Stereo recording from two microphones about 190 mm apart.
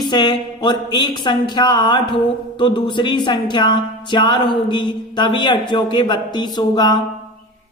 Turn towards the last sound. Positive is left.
turn(degrees=20)  # may be behind; listen again after turning